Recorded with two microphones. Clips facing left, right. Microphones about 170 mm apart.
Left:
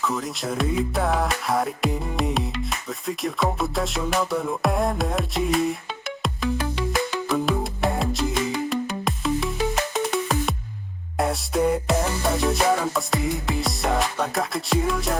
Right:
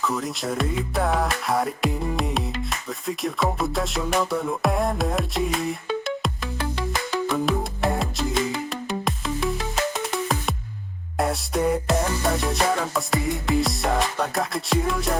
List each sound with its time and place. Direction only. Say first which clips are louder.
0.0 s music: right 1 dB; centre (ahead or behind)
7.3 s music: even; centre (ahead or behind)